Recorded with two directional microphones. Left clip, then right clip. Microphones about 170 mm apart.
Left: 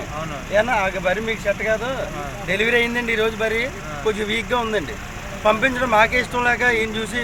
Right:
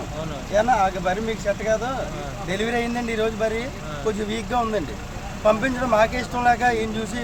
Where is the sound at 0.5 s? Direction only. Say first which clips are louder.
Even; 15° left (ahead or behind).